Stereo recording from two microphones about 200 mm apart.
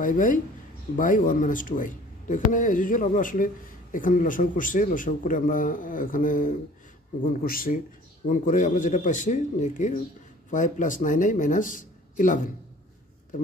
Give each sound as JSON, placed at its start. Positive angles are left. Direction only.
{"t": 0.0, "sound": "a man's voice", "side_deg": 40}